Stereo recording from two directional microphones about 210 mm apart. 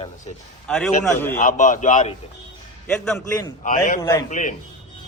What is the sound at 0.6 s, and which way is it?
Speech, 5° left (ahead or behind).